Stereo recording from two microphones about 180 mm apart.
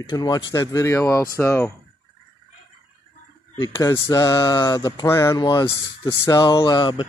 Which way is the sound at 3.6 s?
20° left (ahead or behind).